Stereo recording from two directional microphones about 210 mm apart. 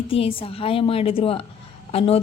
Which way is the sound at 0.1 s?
25° left (ahead or behind).